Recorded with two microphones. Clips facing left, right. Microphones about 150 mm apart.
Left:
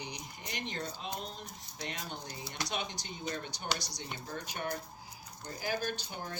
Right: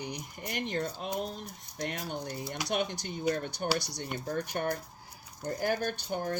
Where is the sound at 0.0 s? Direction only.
55° right (ahead or behind).